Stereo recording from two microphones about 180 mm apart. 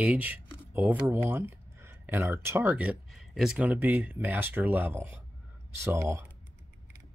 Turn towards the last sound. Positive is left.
turn(degrees=-15)  # may be behind; listen again after turning